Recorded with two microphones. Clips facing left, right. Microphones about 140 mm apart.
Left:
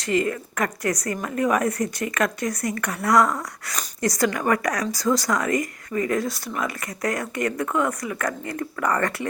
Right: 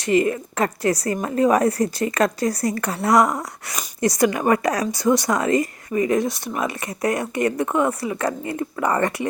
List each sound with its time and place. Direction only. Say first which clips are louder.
0.0 s speech: right 4 dB; 25° right (ahead or behind)